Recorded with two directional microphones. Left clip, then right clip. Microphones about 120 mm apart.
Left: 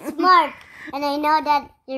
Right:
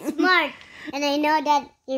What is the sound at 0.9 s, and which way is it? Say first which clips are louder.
Speech: left 2 dB; 40° right (ahead or behind).